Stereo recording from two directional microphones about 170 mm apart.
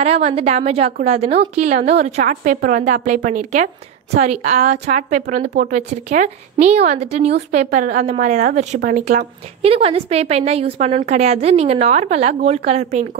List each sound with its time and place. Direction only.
0.0 s a woman's voice: 40° right (ahead or behind)
9.6 s a woman's voice: 35° right (ahead or behind)